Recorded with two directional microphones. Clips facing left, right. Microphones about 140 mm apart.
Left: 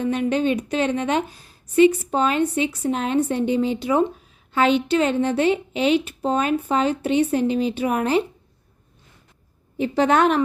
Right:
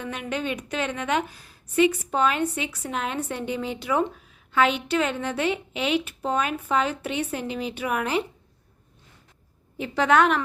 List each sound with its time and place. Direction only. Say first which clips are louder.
0.0 s a woman's voice: left 9 dB; 30° left (ahead or behind)
9.7 s a woman's voice: left 2 dB; 30° left (ahead or behind)